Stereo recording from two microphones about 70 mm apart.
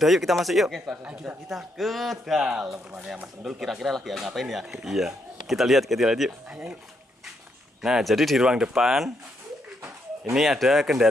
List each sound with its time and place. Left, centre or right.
0.0 s speech: centre
1.0 s speech: centre
1.5 s speech: centre
2.4 s speech: centre
6.5 s speech: centre
7.8 s speech: centre
10.3 s speech: centre